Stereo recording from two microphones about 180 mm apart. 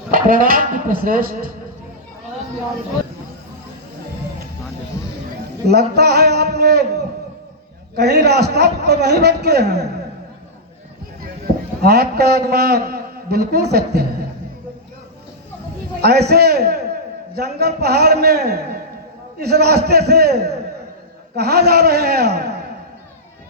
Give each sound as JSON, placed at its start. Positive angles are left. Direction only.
{"t": 0.1, "sound": "speech", "side_deg": -50}
{"t": 5.6, "sound": "a man's voice", "side_deg": -65}
{"t": 7.9, "sound": "a man's voice", "side_deg": -65}
{"t": 11.8, "sound": "a man's voice", "side_deg": -60}
{"t": 16.0, "sound": "a man's voice", "side_deg": -65}